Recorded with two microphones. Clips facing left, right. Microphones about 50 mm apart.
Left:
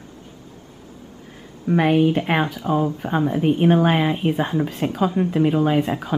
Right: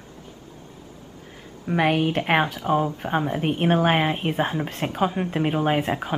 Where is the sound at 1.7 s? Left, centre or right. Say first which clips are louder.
Left 4 dB; centre.